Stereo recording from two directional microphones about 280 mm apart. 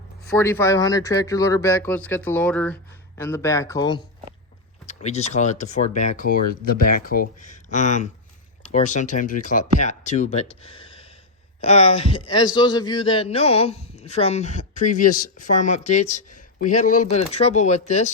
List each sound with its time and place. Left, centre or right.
0.3 s a man's voice: centre; by 18.1 s left